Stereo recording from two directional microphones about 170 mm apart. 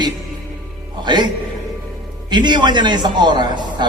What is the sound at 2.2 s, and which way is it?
A woman's voice, 25° right (ahead or behind).